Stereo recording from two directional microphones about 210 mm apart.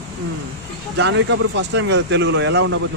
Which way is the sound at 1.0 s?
60° right (ahead or behind).